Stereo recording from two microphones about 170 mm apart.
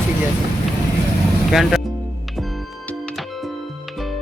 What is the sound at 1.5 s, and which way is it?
Speech, centre (ahead or behind).